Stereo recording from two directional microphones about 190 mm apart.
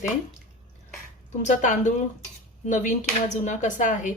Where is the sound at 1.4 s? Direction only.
40° left (ahead or behind).